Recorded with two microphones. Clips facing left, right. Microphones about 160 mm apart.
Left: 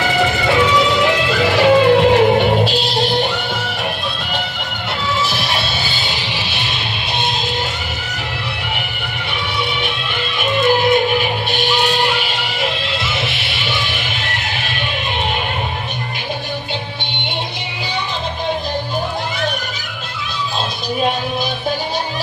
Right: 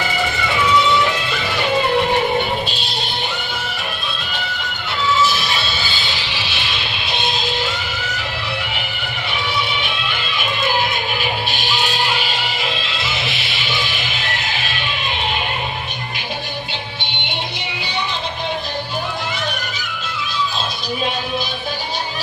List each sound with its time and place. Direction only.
0.9 s music: 90° left
5.1 s music: 60° left (ahead or behind)
10.8 s music: 50° left (ahead or behind)